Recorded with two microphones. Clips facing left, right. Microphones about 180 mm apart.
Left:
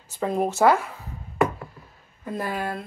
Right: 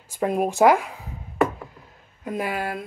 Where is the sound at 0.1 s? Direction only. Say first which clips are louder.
Right 2 dB; 10° right (ahead or behind).